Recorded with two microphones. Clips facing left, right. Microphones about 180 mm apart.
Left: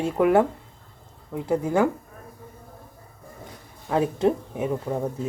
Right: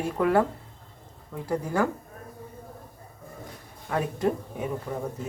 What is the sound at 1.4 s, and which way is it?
Speech, 20° left (ahead or behind).